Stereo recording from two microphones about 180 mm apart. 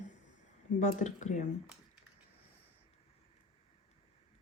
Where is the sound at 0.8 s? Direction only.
45° left (ahead or behind).